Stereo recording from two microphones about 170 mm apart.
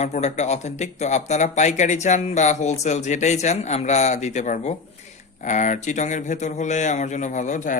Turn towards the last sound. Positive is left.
turn(degrees=45)  # may be behind; listen again after turning